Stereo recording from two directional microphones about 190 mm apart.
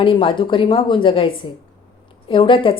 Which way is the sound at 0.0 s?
25° left (ahead or behind).